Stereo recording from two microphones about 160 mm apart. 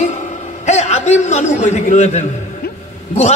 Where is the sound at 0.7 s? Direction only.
45° left (ahead or behind).